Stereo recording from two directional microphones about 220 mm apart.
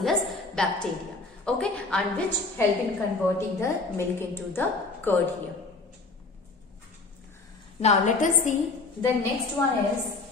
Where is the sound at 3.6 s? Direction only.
10° left (ahead or behind).